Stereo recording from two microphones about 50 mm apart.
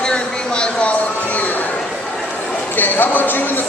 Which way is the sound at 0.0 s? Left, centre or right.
Centre.